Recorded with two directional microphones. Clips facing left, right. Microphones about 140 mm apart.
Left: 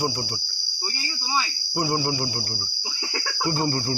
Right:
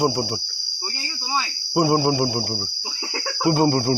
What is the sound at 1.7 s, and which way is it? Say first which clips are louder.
Cricket: right 7 dB; 85° right.